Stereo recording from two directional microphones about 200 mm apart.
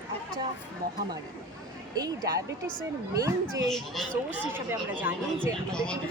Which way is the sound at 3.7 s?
Centre (ahead or behind).